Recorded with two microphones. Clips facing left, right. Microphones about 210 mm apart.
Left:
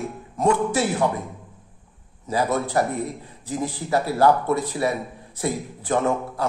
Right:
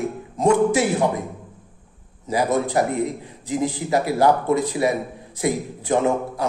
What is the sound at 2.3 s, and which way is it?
A man's voice, 15° right (ahead or behind).